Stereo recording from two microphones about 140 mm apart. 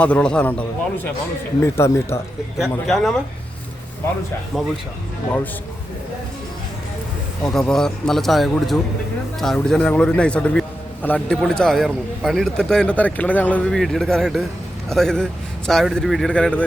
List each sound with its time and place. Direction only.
0.0 s a man's voice: 5° left (ahead or behind)
1.6 s a man's voice: 15° left (ahead or behind)
2.6 s a man's voice: centre (ahead or behind)
4.5 s a man's voice: 5° left (ahead or behind)
7.4 s a man's voice: 5° left (ahead or behind)